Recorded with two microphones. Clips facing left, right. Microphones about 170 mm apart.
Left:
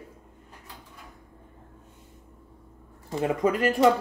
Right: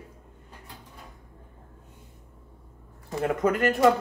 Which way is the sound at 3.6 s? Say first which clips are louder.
Left 1 dB; 25° left (ahead or behind).